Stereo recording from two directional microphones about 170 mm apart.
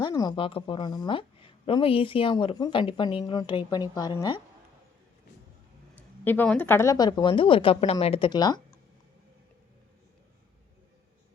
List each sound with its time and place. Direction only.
0.0 s a woman's voice: 25° left (ahead or behind)
6.0 s a woman's voice: 10° left (ahead or behind)